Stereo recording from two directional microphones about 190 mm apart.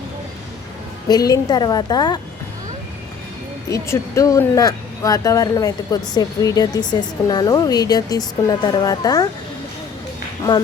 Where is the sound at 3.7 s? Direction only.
15° left (ahead or behind).